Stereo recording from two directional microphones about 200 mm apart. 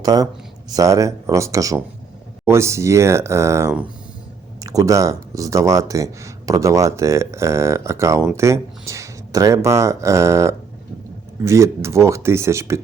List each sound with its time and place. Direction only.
0.0 s speech: 20° right (ahead or behind)